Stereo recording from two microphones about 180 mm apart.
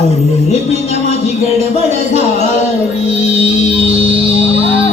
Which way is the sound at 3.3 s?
30° right (ahead or behind).